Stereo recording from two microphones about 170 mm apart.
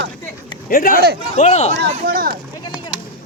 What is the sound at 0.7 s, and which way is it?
Speech, 55° left (ahead or behind).